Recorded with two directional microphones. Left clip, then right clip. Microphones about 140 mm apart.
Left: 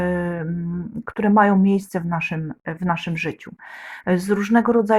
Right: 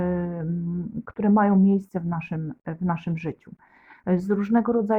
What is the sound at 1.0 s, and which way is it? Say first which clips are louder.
Speech: left 6 dB; 15° left (ahead or behind).